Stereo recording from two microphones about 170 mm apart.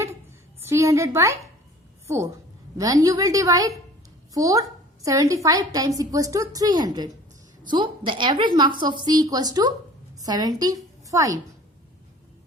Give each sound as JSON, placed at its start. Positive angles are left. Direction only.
{"t": 0.7, "sound": "a woman's voice", "side_deg": -15}